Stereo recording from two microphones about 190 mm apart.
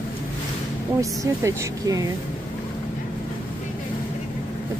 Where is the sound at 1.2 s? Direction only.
15° right (ahead or behind).